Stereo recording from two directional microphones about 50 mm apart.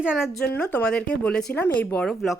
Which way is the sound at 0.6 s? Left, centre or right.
Left.